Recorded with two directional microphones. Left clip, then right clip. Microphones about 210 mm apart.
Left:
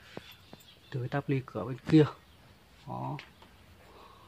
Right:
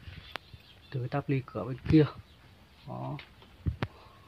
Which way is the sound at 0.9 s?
5° left (ahead or behind).